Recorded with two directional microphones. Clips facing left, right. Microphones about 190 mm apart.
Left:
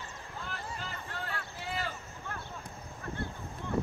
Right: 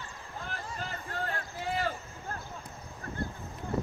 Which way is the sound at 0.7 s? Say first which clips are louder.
Right 4 dB; 45° right (ahead or behind).